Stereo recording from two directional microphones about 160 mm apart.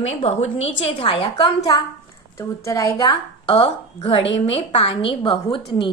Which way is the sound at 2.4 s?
20° left (ahead or behind).